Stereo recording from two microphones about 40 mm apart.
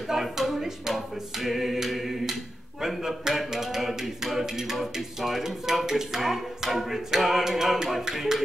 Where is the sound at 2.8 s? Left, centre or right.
Centre.